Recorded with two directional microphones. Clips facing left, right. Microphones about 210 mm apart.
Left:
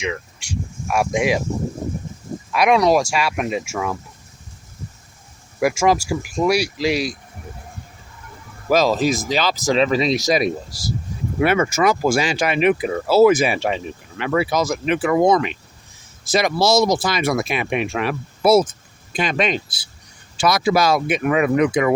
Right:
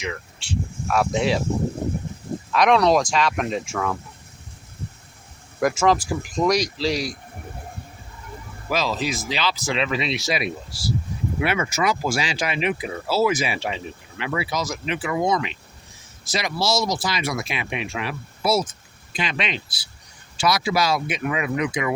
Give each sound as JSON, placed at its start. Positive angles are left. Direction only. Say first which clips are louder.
{"t": 0.0, "sound": "speech", "louder": "left 5 dB", "side_deg": 15}
{"t": 2.5, "sound": "speech", "louder": "left 2 dB", "side_deg": 10}
{"t": 5.5, "sound": "speech", "louder": "left 2 dB", "side_deg": 10}
{"t": 8.7, "sound": "speech", "louder": "left 8 dB", "side_deg": 45}